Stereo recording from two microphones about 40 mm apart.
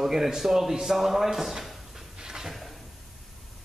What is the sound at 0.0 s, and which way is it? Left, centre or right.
A man's voice, centre.